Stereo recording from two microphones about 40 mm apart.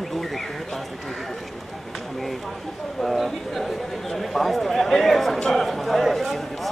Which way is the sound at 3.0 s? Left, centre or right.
Centre.